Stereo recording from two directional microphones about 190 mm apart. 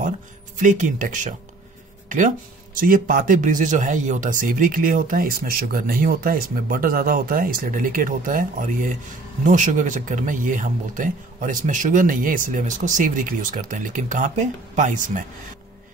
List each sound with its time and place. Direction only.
0.6 s speech: 40° right (ahead or behind)